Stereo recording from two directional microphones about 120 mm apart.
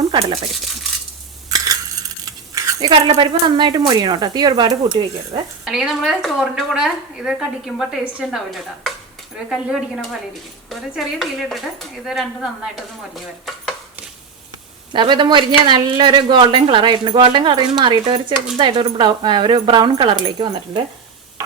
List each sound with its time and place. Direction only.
1.5 s coin: 30° right (ahead or behind)
2.9 s a woman's voice: 40° right (ahead or behind)
5.6 s speech: 5° right (ahead or behind)
14.9 s a woman's voice: 40° right (ahead or behind)